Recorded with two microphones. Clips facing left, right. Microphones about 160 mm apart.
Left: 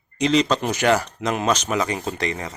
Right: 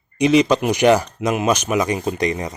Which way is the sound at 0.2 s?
10° right (ahead or behind).